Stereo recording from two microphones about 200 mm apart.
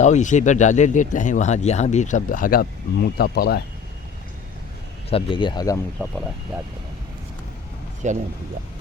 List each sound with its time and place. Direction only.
0.0 s speech: 35° left (ahead or behind)
5.0 s speech: 25° left (ahead or behind)
6.5 s speech: 5° right (ahead or behind)
8.0 s speech: 35° right (ahead or behind)